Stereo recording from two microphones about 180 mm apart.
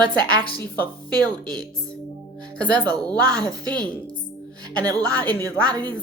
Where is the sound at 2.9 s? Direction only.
20° right (ahead or behind).